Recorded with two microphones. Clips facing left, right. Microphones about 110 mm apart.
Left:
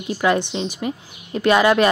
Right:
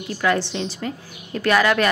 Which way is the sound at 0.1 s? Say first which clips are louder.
Left 2 dB; 20° left (ahead or behind).